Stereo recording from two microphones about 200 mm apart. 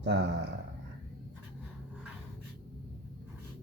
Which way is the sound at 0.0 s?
60° right (ahead or behind).